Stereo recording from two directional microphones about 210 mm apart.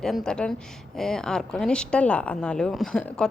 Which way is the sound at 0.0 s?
Centre (ahead or behind).